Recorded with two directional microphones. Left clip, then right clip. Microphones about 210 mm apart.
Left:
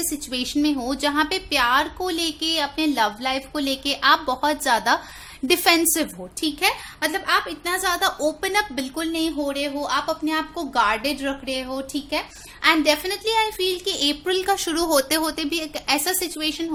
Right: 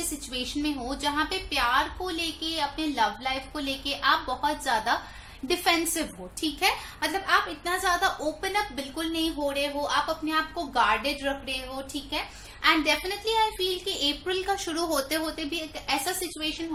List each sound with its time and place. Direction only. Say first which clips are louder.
0.3 s a woman's voice: left 8 dB; 55° left (ahead or behind)